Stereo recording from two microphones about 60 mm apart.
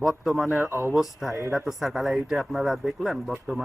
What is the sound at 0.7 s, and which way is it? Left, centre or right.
Speech, right.